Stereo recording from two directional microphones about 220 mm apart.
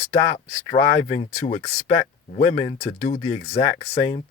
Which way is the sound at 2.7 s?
50° left (ahead or behind).